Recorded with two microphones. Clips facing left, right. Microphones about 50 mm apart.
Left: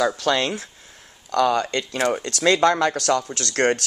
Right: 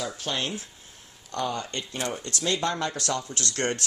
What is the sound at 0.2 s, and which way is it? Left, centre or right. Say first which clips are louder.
Speech: left 9 dB; left.